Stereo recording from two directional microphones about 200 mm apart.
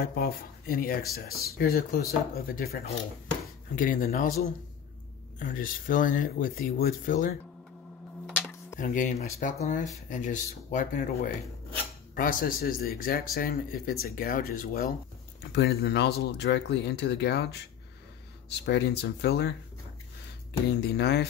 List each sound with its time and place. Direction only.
0.0 s speech: 50° left (ahead or behind)
5.4 s speech: 45° left (ahead or behind)
8.7 s speech: 40° left (ahead or behind)
15.5 s speech: 55° left (ahead or behind)
18.5 s speech: 55° left (ahead or behind)
20.8 s speech: 55° left (ahead or behind)